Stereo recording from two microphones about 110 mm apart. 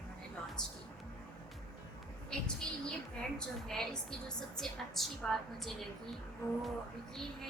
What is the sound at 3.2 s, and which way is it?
A woman's voice, 5° left (ahead or behind).